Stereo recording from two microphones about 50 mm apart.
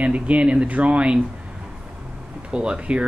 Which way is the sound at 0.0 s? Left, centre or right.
Right.